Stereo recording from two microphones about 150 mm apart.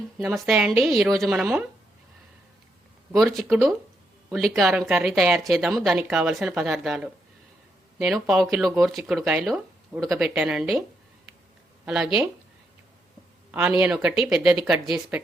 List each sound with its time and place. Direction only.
0.2 s a woman's voice: centre (ahead or behind)
3.1 s a woman's voice: centre (ahead or behind)
11.9 s a woman's voice: 5° right (ahead or behind)
13.5 s speech: 10° right (ahead or behind)